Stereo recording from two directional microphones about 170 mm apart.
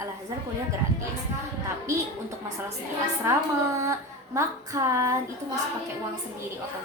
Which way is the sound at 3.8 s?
20° right (ahead or behind).